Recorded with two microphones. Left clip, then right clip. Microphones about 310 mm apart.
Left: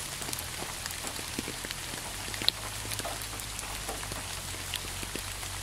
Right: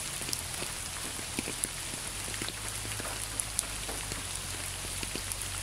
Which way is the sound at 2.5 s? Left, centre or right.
Left.